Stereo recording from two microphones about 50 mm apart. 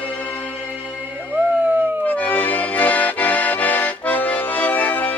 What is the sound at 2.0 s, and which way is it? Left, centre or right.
Accordion, left.